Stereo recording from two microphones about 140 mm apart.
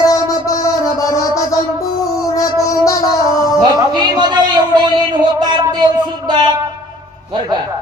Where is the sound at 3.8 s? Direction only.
30° right (ahead or behind).